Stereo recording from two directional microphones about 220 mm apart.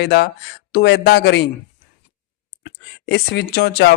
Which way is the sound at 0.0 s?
50° left (ahead or behind).